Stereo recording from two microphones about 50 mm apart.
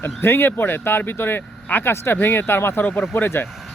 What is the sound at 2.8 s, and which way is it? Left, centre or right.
Speech, left.